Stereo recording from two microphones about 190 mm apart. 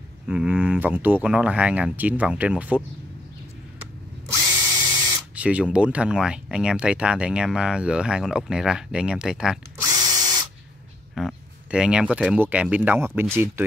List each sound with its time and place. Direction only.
0.3 s speech: 5° right (ahead or behind)
4.3 s drill: 20° right (ahead or behind)
5.3 s speech: 5° right (ahead or behind)
9.8 s drill: 20° right (ahead or behind)
11.1 s speech: centre (ahead or behind)